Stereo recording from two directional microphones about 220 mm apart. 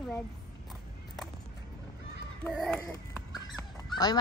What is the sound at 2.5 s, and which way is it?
Speech, centre (ahead or behind).